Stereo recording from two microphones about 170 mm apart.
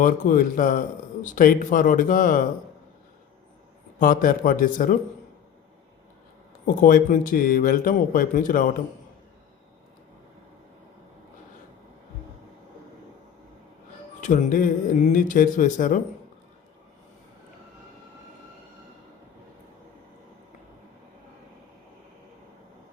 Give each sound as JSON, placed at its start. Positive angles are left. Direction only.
{"t": 0.0, "sound": "speech", "side_deg": 50}
{"t": 4.0, "sound": "speech", "side_deg": 55}
{"t": 6.8, "sound": "speech", "side_deg": 50}
{"t": 14.2, "sound": "speech", "side_deg": 50}